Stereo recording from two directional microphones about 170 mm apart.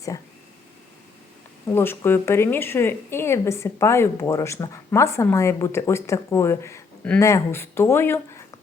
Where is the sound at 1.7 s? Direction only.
15° left (ahead or behind).